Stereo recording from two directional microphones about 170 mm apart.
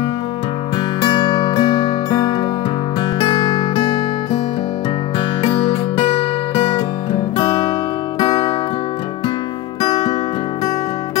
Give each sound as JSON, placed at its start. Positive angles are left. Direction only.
{"t": 1.0, "sound": "music", "side_deg": 25}
{"t": 5.4, "sound": "music", "side_deg": 30}
{"t": 9.8, "sound": "music", "side_deg": 35}